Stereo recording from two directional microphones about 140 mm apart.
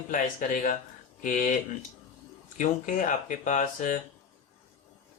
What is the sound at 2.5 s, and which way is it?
Speech, 65° left (ahead or behind).